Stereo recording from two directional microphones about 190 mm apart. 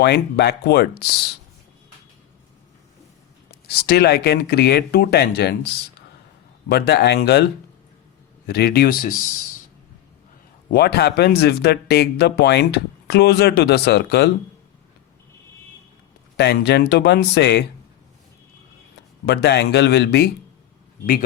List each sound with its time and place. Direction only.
0.0 s speech: 60° left (ahead or behind)
3.8 s speech: 60° left (ahead or behind)
6.7 s speech: 60° left (ahead or behind)
8.4 s speech: 55° left (ahead or behind)
10.7 s speech: 55° left (ahead or behind)
16.4 s speech: 60° left (ahead or behind)
19.2 s speech: 60° left (ahead or behind)